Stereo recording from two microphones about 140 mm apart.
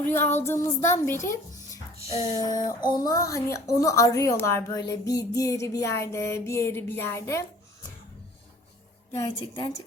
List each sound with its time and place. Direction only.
0.0 s a woman's voice: 15° left (ahead or behind)
2.4 s a woman's voice: 25° left (ahead or behind)
9.1 s a woman's voice: 20° left (ahead or behind)